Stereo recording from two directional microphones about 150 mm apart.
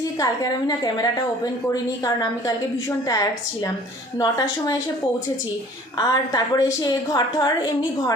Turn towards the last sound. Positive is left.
turn(degrees=25)  # may be behind; listen again after turning